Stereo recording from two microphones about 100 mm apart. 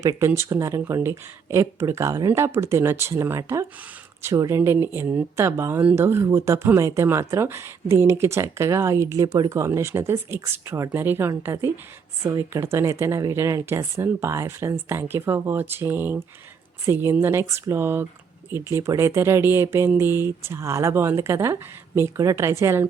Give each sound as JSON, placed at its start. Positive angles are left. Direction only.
{"t": 0.0, "sound": "speech", "side_deg": -30}